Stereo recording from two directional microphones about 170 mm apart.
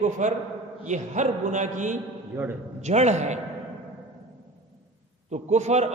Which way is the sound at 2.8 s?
40° right (ahead or behind).